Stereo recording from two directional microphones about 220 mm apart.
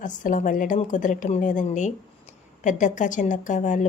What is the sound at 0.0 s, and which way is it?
A woman's voice, 35° left (ahead or behind).